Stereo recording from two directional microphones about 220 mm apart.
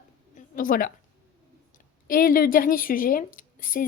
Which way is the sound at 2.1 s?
40° left (ahead or behind).